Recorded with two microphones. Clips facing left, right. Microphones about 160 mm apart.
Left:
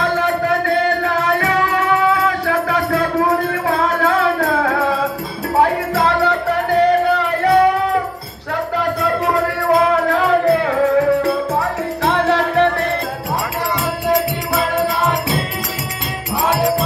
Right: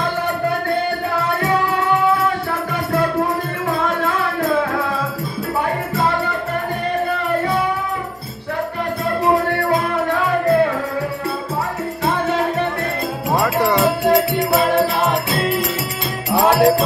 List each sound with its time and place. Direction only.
2.2 s music: 90° left
5.6 s music: 90° left
12.1 s music: 75° left (ahead or behind)